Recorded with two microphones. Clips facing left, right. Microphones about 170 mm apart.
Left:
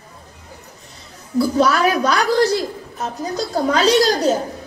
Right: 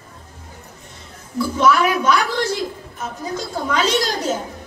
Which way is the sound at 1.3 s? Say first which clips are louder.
Left 1 dB; 35° left (ahead or behind).